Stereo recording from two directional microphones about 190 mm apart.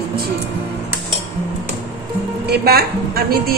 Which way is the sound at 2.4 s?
55° right (ahead or behind).